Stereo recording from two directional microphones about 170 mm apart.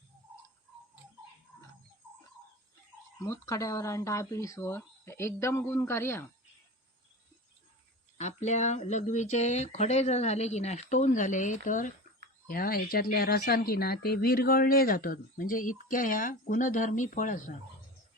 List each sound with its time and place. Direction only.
3.2 s speech: 20° left (ahead or behind)
8.2 s speech: 40° left (ahead or behind)
12.5 s speech: 60° left (ahead or behind)